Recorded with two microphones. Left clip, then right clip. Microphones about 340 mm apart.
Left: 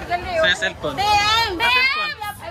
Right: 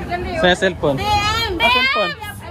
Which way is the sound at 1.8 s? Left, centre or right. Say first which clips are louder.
Right 2 dB; centre.